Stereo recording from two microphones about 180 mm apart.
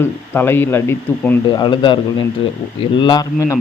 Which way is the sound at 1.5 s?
25° left (ahead or behind).